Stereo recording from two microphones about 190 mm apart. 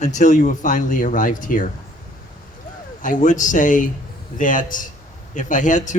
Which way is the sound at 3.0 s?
40° left (ahead or behind).